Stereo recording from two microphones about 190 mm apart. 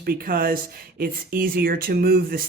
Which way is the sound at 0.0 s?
50° right (ahead or behind).